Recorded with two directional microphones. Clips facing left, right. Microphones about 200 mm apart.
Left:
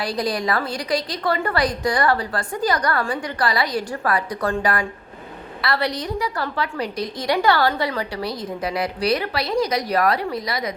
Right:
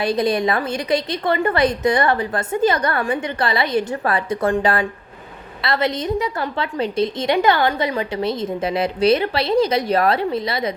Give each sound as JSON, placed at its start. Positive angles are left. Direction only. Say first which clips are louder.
{"t": 0.0, "sound": "a woman's voice", "louder": "right 5 dB", "side_deg": -25}